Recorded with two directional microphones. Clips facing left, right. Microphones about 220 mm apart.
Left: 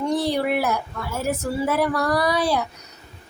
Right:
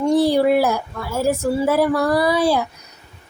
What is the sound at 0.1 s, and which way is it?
Speech, 30° right (ahead or behind).